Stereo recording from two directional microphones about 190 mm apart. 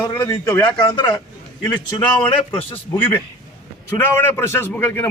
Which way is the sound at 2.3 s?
25° left (ahead or behind).